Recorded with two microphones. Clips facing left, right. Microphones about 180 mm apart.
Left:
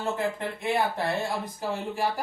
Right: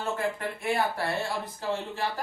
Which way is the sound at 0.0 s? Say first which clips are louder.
Left 1 dB; 20° left (ahead or behind).